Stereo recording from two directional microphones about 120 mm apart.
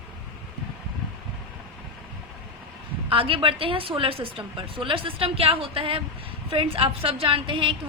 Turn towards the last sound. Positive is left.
turn(degrees=-45)  # may be behind; listen again after turning